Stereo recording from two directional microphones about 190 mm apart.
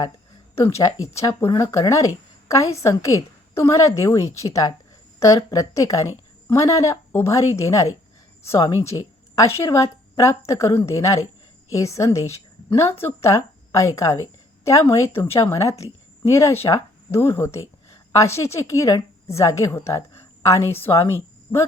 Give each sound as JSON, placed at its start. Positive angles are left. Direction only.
{"t": 0.5, "sound": "a woman's voice", "side_deg": 15}